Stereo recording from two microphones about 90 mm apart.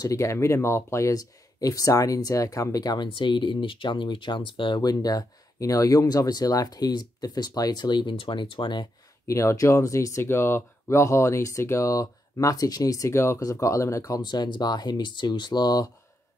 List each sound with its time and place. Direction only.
0.0 s speech: 35° left (ahead or behind)
3.1 s speech: 65° left (ahead or behind)
4.8 s speech: 45° left (ahead or behind); by 8.8 s 60° left (ahead or behind)
9.3 s speech: 35° left (ahead or behind)
14.2 s speech: 50° left (ahead or behind)